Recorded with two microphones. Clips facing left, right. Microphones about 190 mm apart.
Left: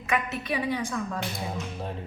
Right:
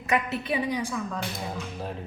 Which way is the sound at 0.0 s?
35° right (ahead or behind).